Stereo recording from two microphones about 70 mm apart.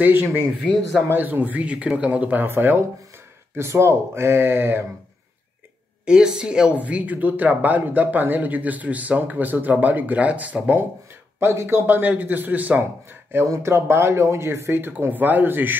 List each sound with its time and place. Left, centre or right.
0.0 s speech: right
0.6 s speech: centre
1.1 s speech: right
3.5 s speech: right
6.0 s speech: centre
11.3 s speech: right
13.5 s speech: right